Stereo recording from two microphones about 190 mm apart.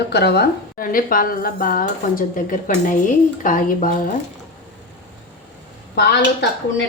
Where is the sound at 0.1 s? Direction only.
60° left (ahead or behind); by 4.1 s 45° left (ahead or behind).